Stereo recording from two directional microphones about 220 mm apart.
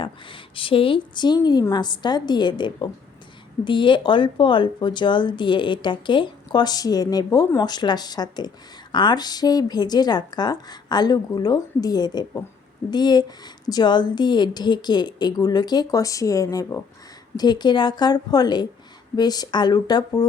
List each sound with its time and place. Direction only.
0.0 s speech: 25° left (ahead or behind)